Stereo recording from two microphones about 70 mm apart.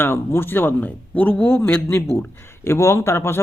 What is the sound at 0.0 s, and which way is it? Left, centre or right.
Speech, left.